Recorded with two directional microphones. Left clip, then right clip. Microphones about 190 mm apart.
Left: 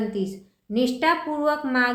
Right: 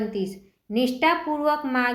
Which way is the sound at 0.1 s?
Centre (ahead or behind).